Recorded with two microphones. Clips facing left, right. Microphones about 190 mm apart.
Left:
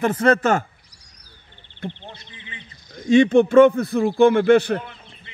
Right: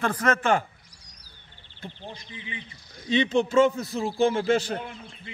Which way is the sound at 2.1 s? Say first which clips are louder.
Right 4 dB; 15° right (ahead or behind).